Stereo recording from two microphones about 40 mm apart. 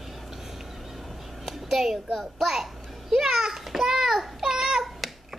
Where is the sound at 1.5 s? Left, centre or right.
Centre.